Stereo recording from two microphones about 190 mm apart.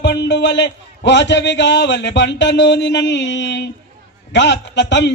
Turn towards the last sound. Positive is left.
turn(degrees=70)  # may be behind; listen again after turning